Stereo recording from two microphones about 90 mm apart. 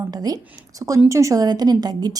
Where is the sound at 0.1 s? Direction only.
45° right (ahead or behind).